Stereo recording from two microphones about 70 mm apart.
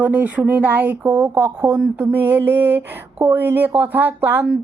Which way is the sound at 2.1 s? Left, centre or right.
Right.